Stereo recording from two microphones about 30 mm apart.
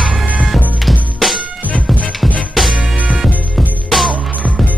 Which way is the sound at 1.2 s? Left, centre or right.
Centre.